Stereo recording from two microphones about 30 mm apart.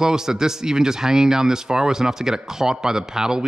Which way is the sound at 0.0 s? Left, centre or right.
Centre.